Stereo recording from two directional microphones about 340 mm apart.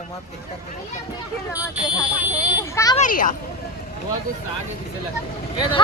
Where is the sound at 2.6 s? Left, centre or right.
Centre.